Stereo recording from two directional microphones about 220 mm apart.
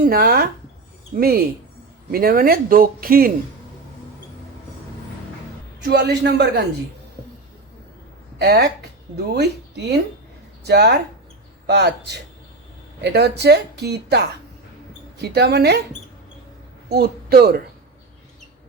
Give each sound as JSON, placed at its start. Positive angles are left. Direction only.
{"t": 0.0, "sound": "a man's voice", "side_deg": -45}
{"t": 5.8, "sound": "speech", "side_deg": -50}
{"t": 8.4, "sound": "speech", "side_deg": -45}